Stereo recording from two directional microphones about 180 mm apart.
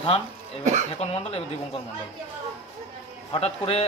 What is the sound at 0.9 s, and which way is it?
Speech, 35° left (ahead or behind).